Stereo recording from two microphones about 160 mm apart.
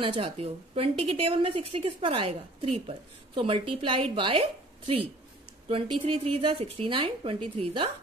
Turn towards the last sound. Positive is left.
turn(degrees=-35)  # may be behind; listen again after turning